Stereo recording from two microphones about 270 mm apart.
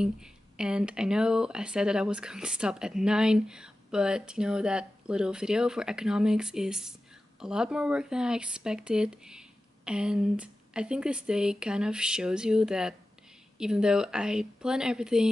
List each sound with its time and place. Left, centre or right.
0.0 s speech: centre